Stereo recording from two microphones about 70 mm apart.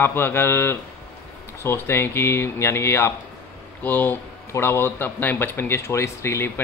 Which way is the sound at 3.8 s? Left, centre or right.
Left.